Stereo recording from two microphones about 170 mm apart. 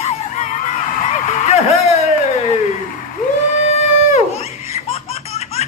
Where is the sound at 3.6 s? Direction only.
40° left (ahead or behind).